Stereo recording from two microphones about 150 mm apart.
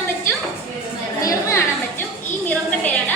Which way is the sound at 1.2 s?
20° left (ahead or behind).